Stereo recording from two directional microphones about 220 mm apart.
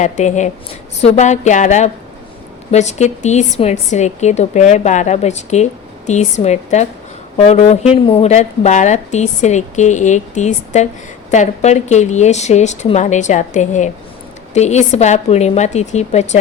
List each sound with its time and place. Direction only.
0.0 s a woman's voice: 35° left (ahead or behind)